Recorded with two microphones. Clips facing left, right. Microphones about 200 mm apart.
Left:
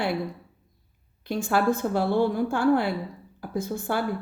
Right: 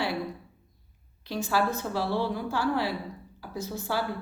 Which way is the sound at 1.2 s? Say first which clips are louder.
Left 3 dB; 50° left (ahead or behind).